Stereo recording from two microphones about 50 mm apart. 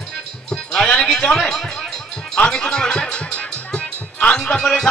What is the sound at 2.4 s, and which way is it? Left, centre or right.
Music, centre.